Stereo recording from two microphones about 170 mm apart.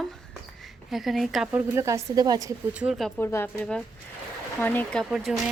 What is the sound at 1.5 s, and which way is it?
A woman's voice, 15° right (ahead or behind).